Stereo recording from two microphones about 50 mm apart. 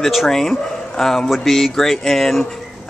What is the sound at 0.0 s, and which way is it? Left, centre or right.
Speech, centre.